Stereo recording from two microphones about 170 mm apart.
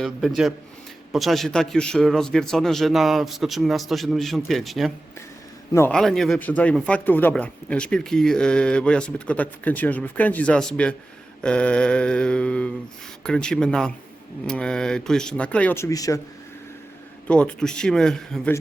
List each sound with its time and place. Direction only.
0.0 s a man's voice: centre (ahead or behind)
5.9 s a man's voice: centre (ahead or behind); by 16.2 s 20° left (ahead or behind)
17.2 s a man's voice: 5° left (ahead or behind)